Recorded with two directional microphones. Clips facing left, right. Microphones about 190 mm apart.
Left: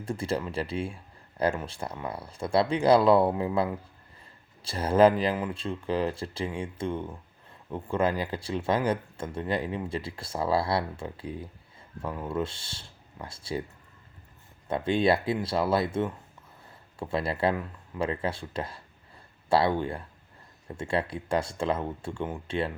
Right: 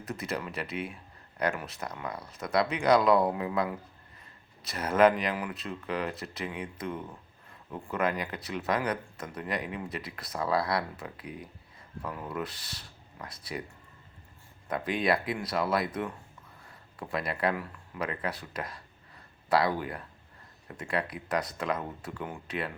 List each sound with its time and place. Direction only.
0.0 s speech: 30° left (ahead or behind)
14.7 s speech: 25° left (ahead or behind)